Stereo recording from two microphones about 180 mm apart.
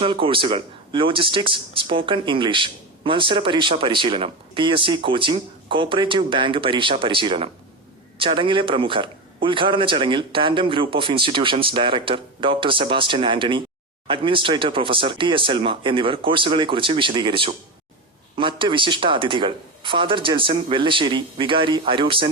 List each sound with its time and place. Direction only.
0.0 s a man's voice: 30° right (ahead or behind)